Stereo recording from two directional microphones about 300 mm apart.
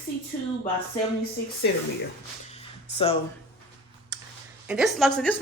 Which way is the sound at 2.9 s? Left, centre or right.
Centre.